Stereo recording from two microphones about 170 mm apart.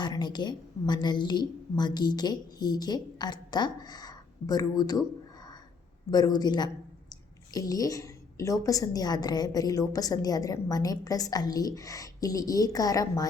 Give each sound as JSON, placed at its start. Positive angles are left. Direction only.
{"t": 0.0, "sound": "a woman's voice", "side_deg": 25}